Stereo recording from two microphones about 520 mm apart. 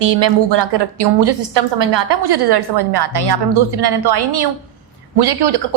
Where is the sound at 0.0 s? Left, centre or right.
Right.